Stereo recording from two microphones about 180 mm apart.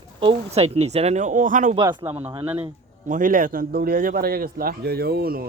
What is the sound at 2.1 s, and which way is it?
Speech, 15° right (ahead or behind).